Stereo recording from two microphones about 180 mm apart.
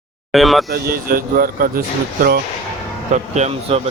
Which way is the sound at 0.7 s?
55° right (ahead or behind).